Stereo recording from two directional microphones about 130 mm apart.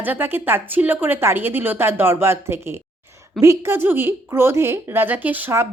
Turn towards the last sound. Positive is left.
turn(degrees=-15)  # may be behind; listen again after turning